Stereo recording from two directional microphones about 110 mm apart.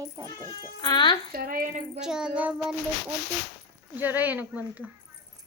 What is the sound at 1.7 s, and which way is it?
Speech, 90° right.